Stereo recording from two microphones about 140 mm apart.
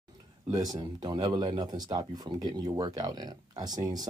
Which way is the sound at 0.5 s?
25° right (ahead or behind).